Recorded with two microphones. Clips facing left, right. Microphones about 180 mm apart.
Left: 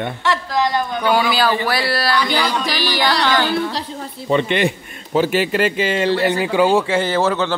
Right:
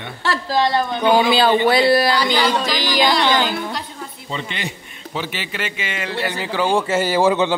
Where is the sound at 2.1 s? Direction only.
35° right (ahead or behind).